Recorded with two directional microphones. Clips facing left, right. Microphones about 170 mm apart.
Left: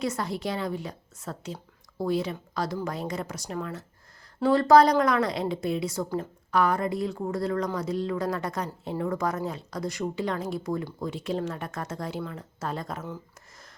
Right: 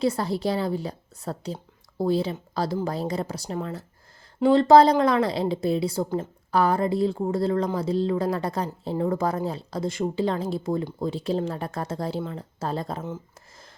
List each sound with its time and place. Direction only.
0.0 s a woman's voice: 30° right (ahead or behind)